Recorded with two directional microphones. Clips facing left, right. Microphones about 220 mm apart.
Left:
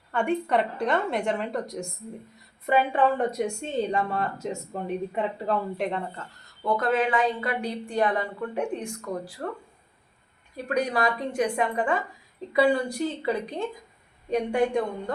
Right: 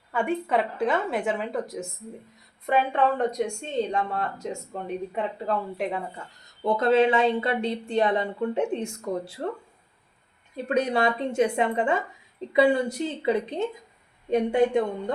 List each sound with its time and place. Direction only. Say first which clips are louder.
0.1 s a woman's voice: left 1 dB; 5° right (ahead or behind); by 9.4 s 25° right (ahead or behind)
10.7 s speech: right 2 dB; 25° right (ahead or behind)